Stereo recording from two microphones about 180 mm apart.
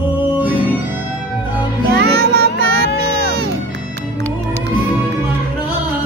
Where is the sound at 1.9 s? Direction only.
60° right (ahead or behind).